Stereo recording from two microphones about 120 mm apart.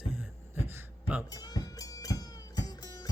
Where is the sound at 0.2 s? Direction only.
20° right (ahead or behind).